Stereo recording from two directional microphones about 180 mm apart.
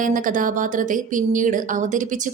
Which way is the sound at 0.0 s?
45° right (ahead or behind).